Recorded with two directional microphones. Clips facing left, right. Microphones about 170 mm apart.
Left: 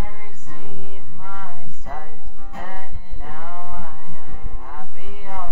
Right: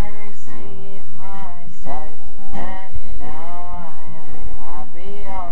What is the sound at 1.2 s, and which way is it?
Music, 20° right (ahead or behind).